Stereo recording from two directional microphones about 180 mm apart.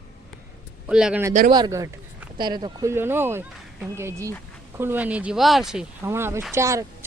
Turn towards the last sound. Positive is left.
turn(degrees=-15)  # may be behind; listen again after turning